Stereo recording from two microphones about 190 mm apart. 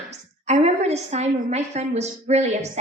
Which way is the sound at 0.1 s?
35° right (ahead or behind).